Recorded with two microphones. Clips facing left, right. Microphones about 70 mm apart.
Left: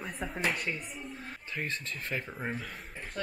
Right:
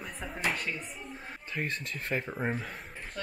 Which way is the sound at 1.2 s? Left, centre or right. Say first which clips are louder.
Right 3 dB; right.